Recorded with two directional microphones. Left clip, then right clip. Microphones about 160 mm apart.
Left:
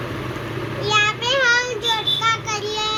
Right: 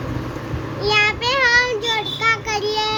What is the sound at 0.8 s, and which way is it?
Child singing, 30° right (ahead or behind).